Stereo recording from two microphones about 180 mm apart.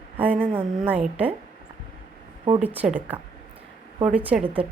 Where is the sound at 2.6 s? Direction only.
10° right (ahead or behind).